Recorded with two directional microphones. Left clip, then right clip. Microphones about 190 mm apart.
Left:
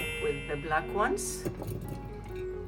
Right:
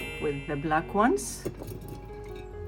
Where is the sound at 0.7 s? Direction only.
30° right (ahead or behind).